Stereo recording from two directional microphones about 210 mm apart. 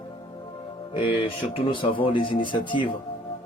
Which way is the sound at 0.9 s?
25° left (ahead or behind).